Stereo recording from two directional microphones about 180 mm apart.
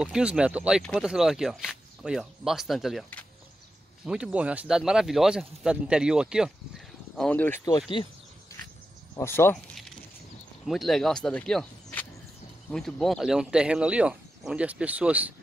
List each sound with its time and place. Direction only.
0.0 s speech: 5° right (ahead or behind)
7.2 s speech: 10° left (ahead or behind)
7.6 s a sound: 25° left (ahead or behind)
9.1 s speech: 15° left (ahead or behind)
10.7 s speech: centre (ahead or behind)